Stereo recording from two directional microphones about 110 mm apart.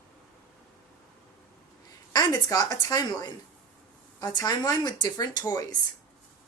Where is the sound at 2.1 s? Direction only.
35° left (ahead or behind).